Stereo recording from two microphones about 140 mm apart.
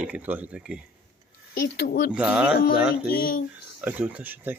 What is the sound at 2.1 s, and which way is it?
Speech, 10° right (ahead or behind).